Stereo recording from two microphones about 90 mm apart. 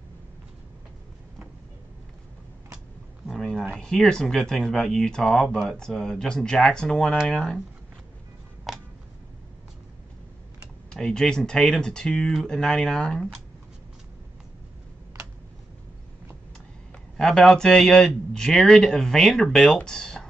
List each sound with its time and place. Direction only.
3.3 s speech: 5° left (ahead or behind)
8.7 s a sound: centre (ahead or behind)
10.9 s speech: 10° left (ahead or behind)
17.2 s speech: 5° left (ahead or behind)